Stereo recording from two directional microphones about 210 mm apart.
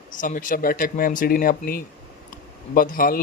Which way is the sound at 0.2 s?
40° left (ahead or behind).